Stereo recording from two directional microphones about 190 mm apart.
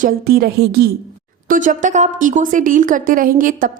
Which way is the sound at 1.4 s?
45° right (ahead or behind).